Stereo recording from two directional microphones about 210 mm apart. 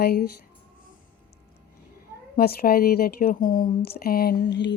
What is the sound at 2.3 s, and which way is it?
Speech, 45° left (ahead or behind).